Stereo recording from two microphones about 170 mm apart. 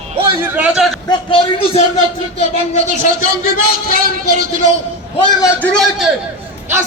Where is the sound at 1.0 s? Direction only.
35° left (ahead or behind).